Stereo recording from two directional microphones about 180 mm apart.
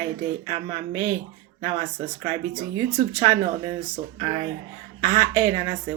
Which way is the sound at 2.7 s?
25° right (ahead or behind).